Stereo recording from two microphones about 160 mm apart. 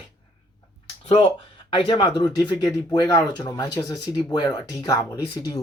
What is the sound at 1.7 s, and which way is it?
Speech, 30° left (ahead or behind).